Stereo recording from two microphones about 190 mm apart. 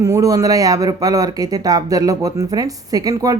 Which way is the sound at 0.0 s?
15° right (ahead or behind).